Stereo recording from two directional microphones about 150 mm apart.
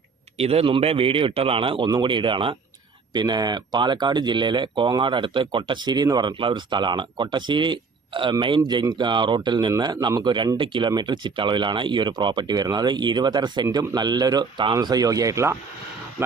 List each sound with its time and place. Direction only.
0.3 s speech: 40° right (ahead or behind); by 15.5 s 20° right (ahead or behind)